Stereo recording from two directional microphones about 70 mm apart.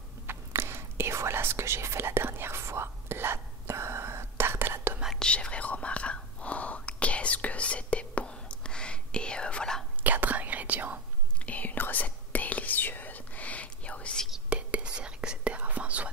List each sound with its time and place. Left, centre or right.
0.3 s whispering: right
5.1 s whispering: centre
10.0 s whispering: right
11.4 s whispering: left
14.5 s whispering: centre